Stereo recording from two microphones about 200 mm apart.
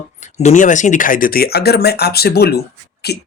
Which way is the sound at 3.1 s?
55° left (ahead or behind).